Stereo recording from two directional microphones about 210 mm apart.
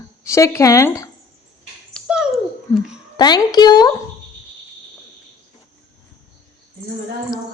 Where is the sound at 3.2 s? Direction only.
20° left (ahead or behind).